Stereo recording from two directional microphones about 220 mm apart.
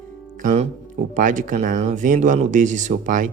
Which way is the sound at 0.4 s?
30° right (ahead or behind).